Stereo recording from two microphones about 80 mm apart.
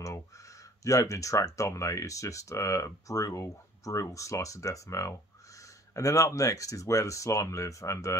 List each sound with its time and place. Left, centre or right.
0.8 s speech: left